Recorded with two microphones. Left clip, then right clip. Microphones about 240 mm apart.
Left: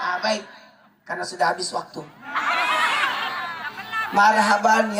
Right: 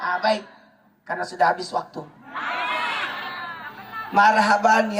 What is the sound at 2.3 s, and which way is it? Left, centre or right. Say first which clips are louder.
Crowd: left 4 dB; centre.